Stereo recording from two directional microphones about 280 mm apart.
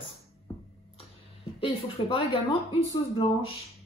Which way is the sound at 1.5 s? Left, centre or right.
Left.